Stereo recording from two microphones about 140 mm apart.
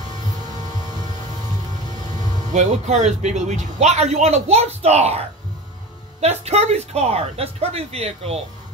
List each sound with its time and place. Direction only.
2.5 s a man's voice: 55° right (ahead or behind)
6.2 s a man's voice: 50° right (ahead or behind)